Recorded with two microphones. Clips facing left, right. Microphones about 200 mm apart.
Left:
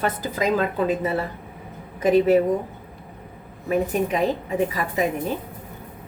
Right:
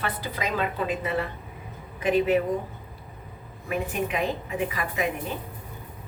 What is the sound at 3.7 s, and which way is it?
A woman's voice, 35° left (ahead or behind).